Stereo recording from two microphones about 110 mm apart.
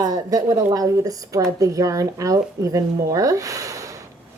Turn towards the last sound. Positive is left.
turn(degrees=-30)  # may be behind; listen again after turning